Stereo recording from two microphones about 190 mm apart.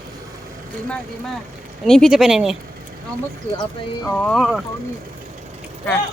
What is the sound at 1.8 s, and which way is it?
Speech, centre (ahead or behind).